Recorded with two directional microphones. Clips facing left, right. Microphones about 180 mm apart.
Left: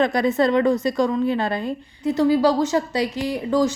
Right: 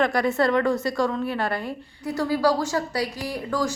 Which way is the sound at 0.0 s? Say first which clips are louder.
Left 3 dB; 20° left (ahead or behind).